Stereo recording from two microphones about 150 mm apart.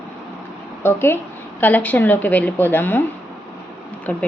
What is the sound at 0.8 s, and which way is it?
Speech, 15° left (ahead or behind).